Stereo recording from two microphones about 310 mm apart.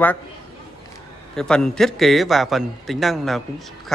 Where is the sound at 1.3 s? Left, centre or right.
Centre.